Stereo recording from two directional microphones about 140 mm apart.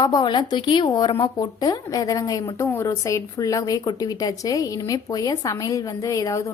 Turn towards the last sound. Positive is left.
turn(degrees=25)  # may be behind; listen again after turning